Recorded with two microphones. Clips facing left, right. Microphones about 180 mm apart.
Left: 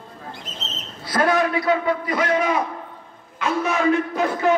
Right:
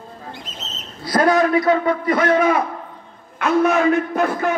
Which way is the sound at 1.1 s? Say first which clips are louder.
Right 4 dB; 40° right (ahead or behind).